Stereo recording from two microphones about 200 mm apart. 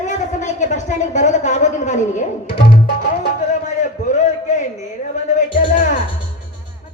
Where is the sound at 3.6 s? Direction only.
35° left (ahead or behind).